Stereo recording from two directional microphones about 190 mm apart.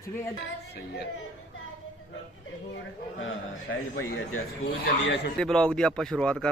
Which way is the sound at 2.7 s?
85° left.